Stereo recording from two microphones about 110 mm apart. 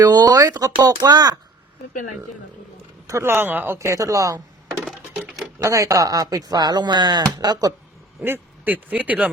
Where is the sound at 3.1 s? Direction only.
25° right (ahead or behind).